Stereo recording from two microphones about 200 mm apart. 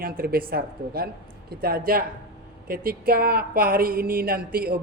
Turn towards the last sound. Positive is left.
turn(degrees=-50)  # may be behind; listen again after turning